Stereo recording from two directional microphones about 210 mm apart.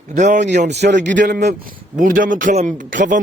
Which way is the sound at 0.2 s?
35° right (ahead or behind).